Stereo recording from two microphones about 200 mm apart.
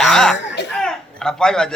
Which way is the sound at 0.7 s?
5° left (ahead or behind).